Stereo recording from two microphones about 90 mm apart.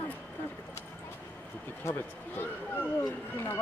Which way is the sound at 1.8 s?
25° left (ahead or behind).